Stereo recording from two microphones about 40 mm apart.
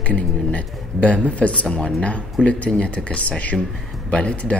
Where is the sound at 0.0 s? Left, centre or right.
Left.